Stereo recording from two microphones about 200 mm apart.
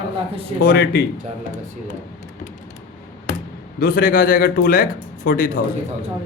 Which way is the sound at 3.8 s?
45° left (ahead or behind).